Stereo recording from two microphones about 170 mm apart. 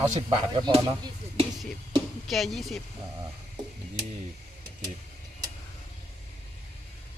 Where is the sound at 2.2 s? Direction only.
Centre (ahead or behind).